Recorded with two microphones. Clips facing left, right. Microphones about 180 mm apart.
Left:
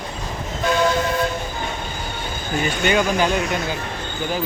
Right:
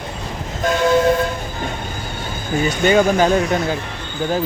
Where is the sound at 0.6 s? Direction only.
45° right (ahead or behind).